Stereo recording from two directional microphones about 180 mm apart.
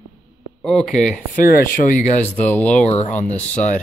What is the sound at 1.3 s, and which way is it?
Speech, 45° left (ahead or behind).